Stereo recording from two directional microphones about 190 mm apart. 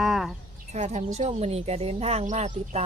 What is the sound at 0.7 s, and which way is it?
Speech, 35° right (ahead or behind).